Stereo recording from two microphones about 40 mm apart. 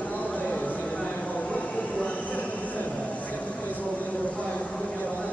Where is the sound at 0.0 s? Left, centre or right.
Left.